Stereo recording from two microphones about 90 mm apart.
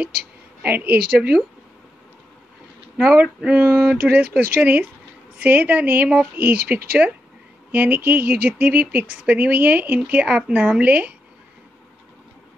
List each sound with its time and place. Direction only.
0.6 s speech: 20° right (ahead or behind)
3.0 s speech: 10° right (ahead or behind)